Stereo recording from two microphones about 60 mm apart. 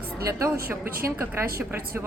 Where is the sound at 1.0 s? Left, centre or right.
Right.